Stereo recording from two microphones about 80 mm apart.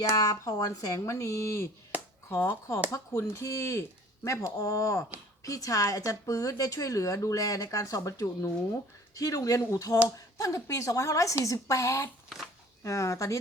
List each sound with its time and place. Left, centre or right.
0.0 s speech: left